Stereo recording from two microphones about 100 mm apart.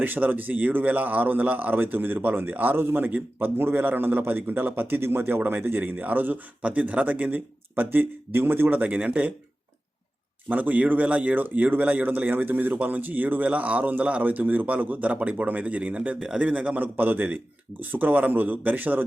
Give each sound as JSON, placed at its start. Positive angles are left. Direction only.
{"t": 0.0, "sound": "speech", "side_deg": -20}
{"t": 10.5, "sound": "speech", "side_deg": -15}